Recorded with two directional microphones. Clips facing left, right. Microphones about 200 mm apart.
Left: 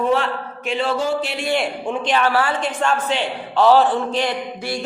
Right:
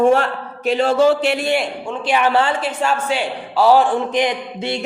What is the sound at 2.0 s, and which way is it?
Speech, 15° right (ahead or behind).